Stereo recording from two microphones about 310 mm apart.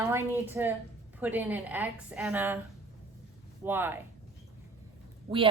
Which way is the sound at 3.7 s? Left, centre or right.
Centre.